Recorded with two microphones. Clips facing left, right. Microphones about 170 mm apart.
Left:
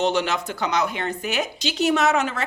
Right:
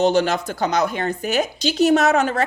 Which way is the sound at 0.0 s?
40° right (ahead or behind).